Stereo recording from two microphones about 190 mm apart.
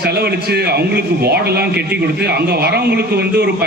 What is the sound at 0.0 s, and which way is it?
A man's voice, 60° right (ahead or behind).